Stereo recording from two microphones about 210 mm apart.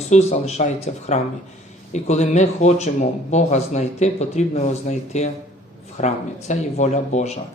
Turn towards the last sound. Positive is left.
turn(degrees=30)  # may be behind; listen again after turning